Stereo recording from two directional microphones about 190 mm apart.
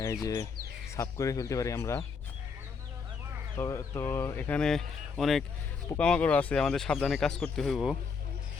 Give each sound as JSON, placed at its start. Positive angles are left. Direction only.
{"t": 0.0, "sound": "speech", "side_deg": 15}
{"t": 3.6, "sound": "speech", "side_deg": 15}